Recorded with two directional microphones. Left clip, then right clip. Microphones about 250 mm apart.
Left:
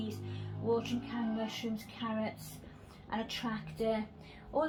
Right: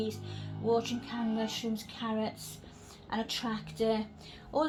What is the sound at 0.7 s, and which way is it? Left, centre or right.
A woman's voice, right.